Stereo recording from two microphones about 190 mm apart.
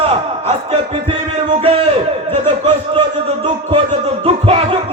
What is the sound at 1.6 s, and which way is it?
Speech, 30° right (ahead or behind).